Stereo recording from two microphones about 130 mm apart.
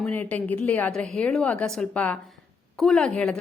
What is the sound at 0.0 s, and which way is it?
A woman's voice, 15° left (ahead or behind).